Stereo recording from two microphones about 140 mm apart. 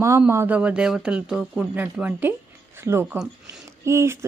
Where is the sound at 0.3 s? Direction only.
15° right (ahead or behind).